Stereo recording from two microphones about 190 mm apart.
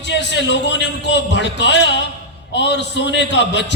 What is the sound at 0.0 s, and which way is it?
A man's voice, 65° left (ahead or behind).